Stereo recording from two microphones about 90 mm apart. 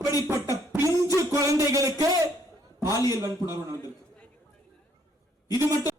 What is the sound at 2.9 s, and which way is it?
Music, 40° left (ahead or behind).